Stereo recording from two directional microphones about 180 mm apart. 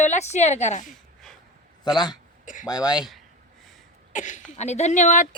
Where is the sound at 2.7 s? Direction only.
20° left (ahead or behind).